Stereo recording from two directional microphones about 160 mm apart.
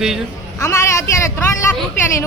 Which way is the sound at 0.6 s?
20° left (ahead or behind).